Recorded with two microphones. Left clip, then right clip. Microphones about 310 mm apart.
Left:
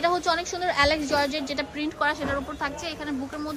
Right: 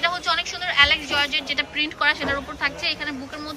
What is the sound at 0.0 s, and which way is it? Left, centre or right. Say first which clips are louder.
A woman's voice: right 1 dB; centre.